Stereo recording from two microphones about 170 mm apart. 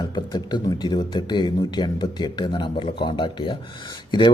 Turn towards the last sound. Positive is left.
turn(degrees=30)  # may be behind; listen again after turning